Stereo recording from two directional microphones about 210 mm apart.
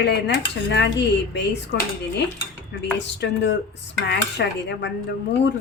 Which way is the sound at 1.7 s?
55° left (ahead or behind).